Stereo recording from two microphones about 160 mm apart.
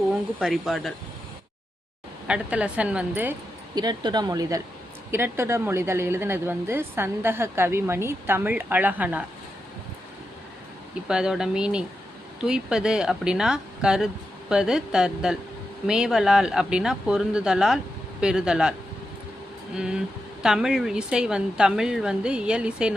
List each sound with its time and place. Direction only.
0.3 s a woman's voice: 5° right (ahead or behind)
2.2 s a woman's voice: 5° right (ahead or behind)
3.8 s a woman's voice: 25° right (ahead or behind); by 9.2 s 10° right (ahead or behind)
11.1 s a woman's voice: 5° right (ahead or behind)
19.7 s a woman's voice: 5° right (ahead or behind)